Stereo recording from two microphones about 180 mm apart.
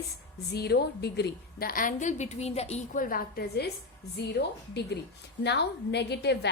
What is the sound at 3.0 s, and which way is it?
A woman's voice, 55° left (ahead or behind).